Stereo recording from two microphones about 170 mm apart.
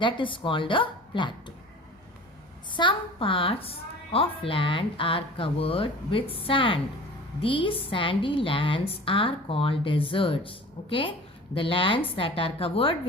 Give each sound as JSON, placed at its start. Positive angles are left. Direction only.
{"t": 0.0, "sound": "a woman's voice", "side_deg": 30}
{"t": 2.6, "sound": "a woman's voice", "side_deg": 30}